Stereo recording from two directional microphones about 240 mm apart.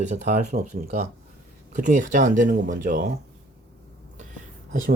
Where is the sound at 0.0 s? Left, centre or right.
Right.